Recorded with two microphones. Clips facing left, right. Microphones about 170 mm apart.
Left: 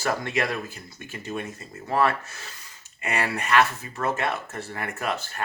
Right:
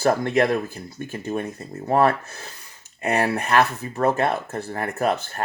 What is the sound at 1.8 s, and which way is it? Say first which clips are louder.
Speech: right 5 dB; 50° right (ahead or behind).